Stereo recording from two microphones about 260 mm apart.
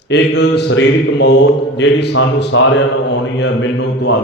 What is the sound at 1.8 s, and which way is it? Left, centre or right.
Mantra, left.